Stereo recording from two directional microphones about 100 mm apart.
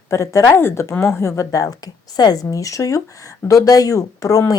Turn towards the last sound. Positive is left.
turn(degrees=35)  # may be behind; listen again after turning